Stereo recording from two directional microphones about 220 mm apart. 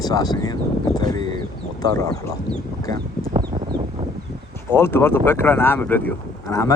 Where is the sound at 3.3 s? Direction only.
20° right (ahead or behind).